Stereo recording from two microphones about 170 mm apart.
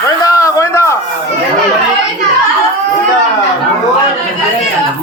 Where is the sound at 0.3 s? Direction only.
20° left (ahead or behind).